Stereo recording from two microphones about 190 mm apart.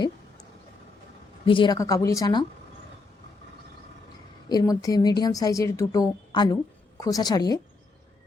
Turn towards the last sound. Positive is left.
turn(degrees=20)  # may be behind; listen again after turning